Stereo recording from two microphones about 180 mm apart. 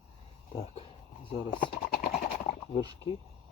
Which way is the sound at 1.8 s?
55° left (ahead or behind).